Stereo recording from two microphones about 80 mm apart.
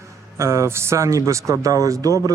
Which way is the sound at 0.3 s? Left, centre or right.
Right.